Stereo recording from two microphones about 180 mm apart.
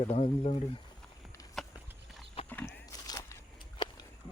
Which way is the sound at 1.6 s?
Centre (ahead or behind).